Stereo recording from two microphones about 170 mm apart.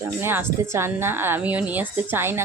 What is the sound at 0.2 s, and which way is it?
Speech, 15° right (ahead or behind).